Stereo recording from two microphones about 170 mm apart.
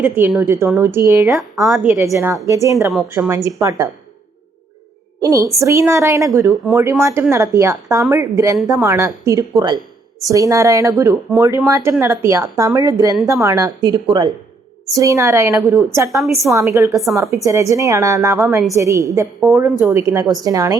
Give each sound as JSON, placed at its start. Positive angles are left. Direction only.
{"t": 0.0, "sound": "speech", "side_deg": -10}
{"t": 1.6, "sound": "a woman's voice", "side_deg": 0}
{"t": 2.1, "sound": "a woman's voice", "side_deg": -15}
{"t": 5.2, "sound": "a woman's voice", "side_deg": -20}
{"t": 16.9, "sound": "a woman's voice", "side_deg": 0}
{"t": 17.2, "sound": "a woman's voice", "side_deg": -20}